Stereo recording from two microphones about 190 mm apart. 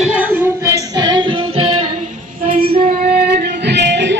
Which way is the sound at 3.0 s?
55° right (ahead or behind).